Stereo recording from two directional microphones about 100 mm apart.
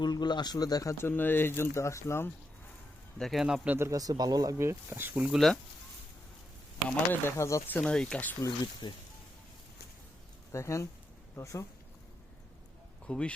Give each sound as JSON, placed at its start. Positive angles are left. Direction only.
{"t": 0.0, "sound": "speech", "side_deg": 45}
{"t": 0.9, "sound": "speech", "side_deg": 20}
{"t": 3.2, "sound": "speech", "side_deg": 0}
{"t": 3.8, "sound": "speech", "side_deg": -35}
{"t": 4.5, "sound": "speech", "side_deg": -25}
{"t": 6.8, "sound": "speech", "side_deg": 20}
{"t": 7.3, "sound": "speech", "side_deg": 30}
{"t": 7.7, "sound": "speech", "side_deg": 10}
{"t": 8.4, "sound": "speech", "side_deg": 40}
{"t": 10.5, "sound": "speech", "side_deg": 30}
{"t": 13.1, "sound": "speech", "side_deg": 10}